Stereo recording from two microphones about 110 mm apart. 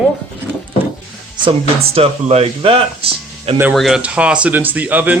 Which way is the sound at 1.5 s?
65° right (ahead or behind).